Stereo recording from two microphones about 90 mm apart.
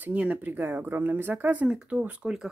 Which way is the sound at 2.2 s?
5° right (ahead or behind).